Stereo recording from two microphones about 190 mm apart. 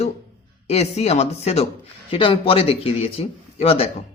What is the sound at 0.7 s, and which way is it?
Speech, 35° left (ahead or behind).